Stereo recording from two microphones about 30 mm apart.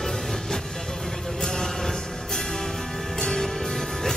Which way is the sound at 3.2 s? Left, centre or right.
Centre.